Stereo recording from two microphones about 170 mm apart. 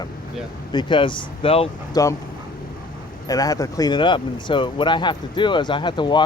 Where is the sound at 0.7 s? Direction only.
30° left (ahead or behind).